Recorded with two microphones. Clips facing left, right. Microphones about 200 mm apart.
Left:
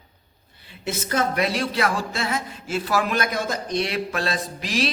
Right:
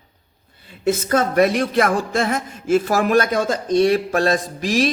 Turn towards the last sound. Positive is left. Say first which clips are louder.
# right 6 dB
turn(degrees=-45)  # may be behind; listen again after turning